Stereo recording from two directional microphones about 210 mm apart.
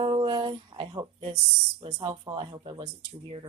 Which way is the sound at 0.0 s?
25° right (ahead or behind).